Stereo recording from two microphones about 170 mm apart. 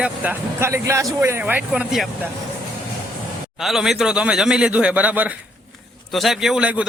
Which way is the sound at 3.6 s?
Centre (ahead or behind).